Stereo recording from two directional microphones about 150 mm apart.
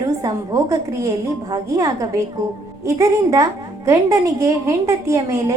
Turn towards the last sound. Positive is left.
turn(degrees=-20)  # may be behind; listen again after turning